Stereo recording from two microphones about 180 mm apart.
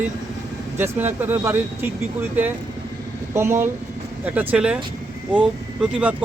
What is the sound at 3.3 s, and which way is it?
Speech, 15° right (ahead or behind).